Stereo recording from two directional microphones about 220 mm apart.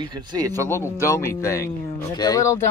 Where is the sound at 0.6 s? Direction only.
10° left (ahead or behind).